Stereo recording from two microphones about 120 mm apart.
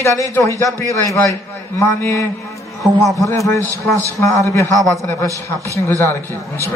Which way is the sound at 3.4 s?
25° left (ahead or behind).